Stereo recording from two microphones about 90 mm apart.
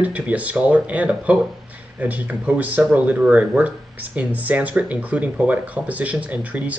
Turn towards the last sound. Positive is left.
turn(degrees=-15)  # may be behind; listen again after turning